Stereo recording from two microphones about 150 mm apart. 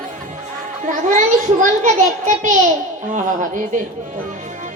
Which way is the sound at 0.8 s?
60° right (ahead or behind).